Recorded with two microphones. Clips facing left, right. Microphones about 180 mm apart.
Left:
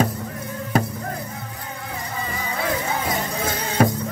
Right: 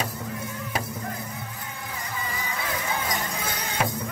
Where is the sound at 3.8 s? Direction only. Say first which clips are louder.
Left 9 dB; 40° left (ahead or behind).